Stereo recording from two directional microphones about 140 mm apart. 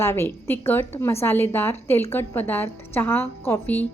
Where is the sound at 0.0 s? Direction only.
20° left (ahead or behind).